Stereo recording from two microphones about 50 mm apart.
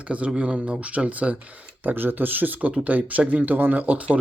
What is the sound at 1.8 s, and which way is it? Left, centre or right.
Speech, right.